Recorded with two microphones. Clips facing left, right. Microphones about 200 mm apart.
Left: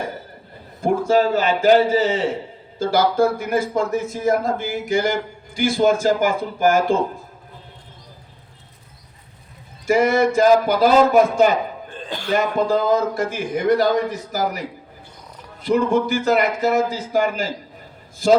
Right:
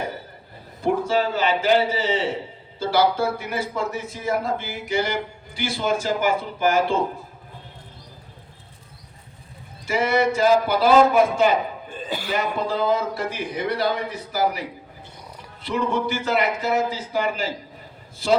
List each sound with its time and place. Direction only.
0.8 s a man's voice: 45° left (ahead or behind)
9.8 s a man's voice: 45° left (ahead or behind)
11.9 s throat clearing: 5° right (ahead or behind)
12.3 s a man's voice: 45° left (ahead or behind)
15.6 s a man's voice: 45° left (ahead or behind)